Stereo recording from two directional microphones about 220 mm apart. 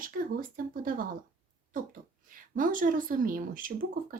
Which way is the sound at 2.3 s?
40° right (ahead or behind).